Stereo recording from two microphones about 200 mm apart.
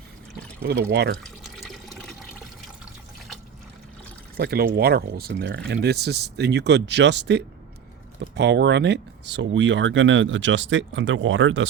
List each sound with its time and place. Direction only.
0.6 s speech: 55° right (ahead or behind)
1.5 s water: centre (ahead or behind)
4.4 s speech: 50° right (ahead or behind); by 11.7 s 70° right (ahead or behind)